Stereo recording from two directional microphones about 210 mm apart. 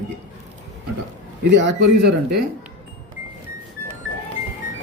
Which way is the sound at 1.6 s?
55° right (ahead or behind).